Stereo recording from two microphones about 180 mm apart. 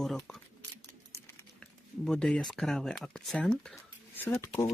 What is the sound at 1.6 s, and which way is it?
Speech, 5° left (ahead or behind).